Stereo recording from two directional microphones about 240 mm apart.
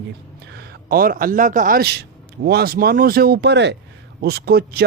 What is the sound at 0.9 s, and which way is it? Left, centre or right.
A man's voice, right.